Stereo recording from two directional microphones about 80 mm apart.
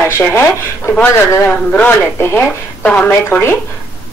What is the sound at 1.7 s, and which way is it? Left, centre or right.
Speech, left.